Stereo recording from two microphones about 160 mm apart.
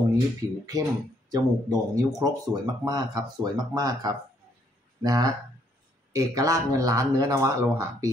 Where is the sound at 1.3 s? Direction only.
20° right (ahead or behind).